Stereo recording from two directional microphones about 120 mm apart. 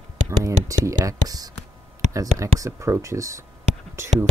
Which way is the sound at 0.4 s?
25° right (ahead or behind).